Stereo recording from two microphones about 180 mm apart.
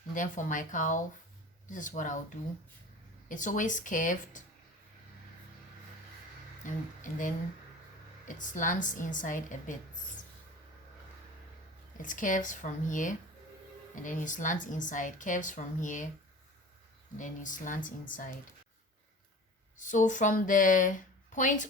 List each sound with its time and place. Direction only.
0.1 s speech: 45° left (ahead or behind)
3.2 s speech: 45° left (ahead or behind)
6.7 s speech: 45° left (ahead or behind)
12.0 s speech: 45° left (ahead or behind)
17.2 s speech: 45° left (ahead or behind)
19.7 s speech: 45° left (ahead or behind)